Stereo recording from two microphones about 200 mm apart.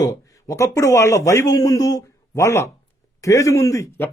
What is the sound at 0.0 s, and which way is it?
A man's voice, 15° left (ahead or behind).